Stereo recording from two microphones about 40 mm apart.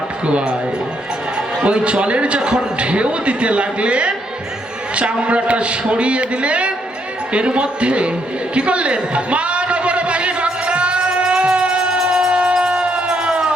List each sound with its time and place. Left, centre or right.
0.3 s a man's voice: right
1.6 s a man's voice: right
8.5 s a sound: right
12.0 s music: right